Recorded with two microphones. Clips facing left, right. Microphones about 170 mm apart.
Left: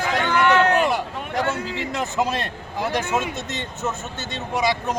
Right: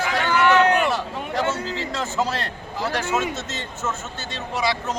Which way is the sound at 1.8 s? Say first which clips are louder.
Left 1 dB; 15° left (ahead or behind).